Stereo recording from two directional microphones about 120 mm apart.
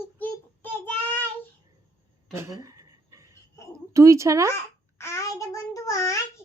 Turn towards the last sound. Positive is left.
turn(degrees=25)  # may be behind; listen again after turning